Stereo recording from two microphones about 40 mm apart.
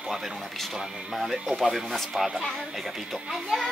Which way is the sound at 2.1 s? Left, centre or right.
Centre.